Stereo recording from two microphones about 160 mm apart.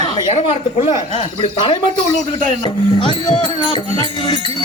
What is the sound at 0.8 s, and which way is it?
Speech, 35° left (ahead or behind).